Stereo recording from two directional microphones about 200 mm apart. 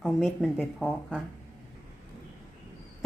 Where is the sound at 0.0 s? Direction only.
Centre (ahead or behind).